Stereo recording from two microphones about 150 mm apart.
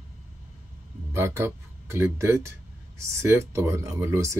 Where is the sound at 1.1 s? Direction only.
15° right (ahead or behind).